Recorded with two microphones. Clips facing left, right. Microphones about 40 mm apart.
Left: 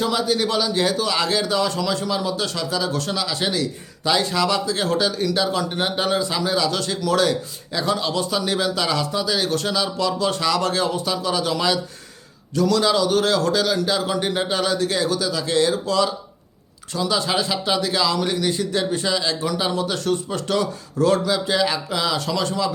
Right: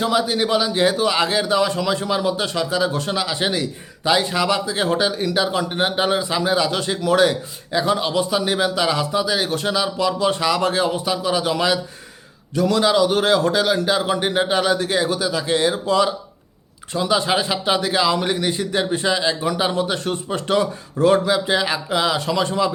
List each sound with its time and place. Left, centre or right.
0.0 s a man's voice: centre